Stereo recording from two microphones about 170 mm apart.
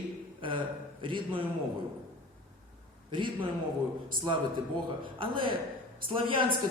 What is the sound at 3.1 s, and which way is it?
Speech, 30° right (ahead or behind).